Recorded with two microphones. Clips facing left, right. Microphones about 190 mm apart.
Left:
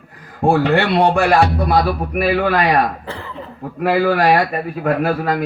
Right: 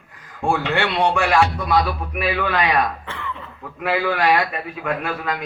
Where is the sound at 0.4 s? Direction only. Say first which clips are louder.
Left 6 dB; 35° left (ahead or behind).